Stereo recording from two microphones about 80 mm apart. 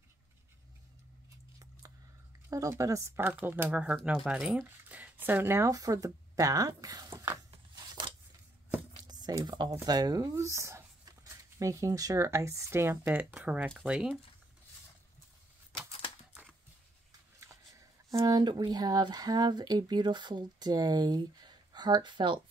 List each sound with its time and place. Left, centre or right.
2.7 s speech: right
5.7 s speech: right
7.7 s scissors: right
9.0 s speech: right; by 14.2 s centre
17.4 s speech: right